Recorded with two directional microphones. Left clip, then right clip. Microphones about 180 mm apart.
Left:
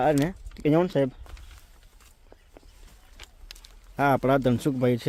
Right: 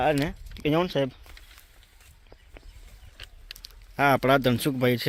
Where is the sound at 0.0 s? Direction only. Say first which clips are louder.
Left 1 dB; 20° left (ahead or behind).